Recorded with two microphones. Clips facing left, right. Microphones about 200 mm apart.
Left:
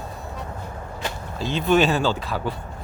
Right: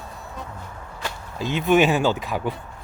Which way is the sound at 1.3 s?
15° right (ahead or behind).